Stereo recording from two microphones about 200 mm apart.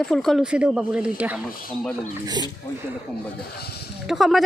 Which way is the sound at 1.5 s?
45° left (ahead or behind).